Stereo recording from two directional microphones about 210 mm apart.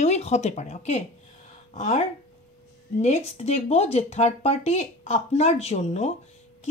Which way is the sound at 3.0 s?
30° left (ahead or behind).